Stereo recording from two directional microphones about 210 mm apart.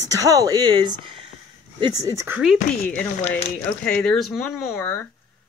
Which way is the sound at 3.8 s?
Centre (ahead or behind).